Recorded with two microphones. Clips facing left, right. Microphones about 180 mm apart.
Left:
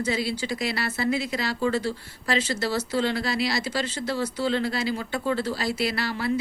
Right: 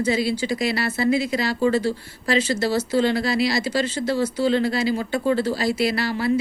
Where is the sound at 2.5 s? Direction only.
35° right (ahead or behind).